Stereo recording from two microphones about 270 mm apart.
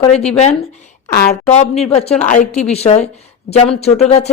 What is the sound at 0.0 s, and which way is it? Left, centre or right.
Speech, left.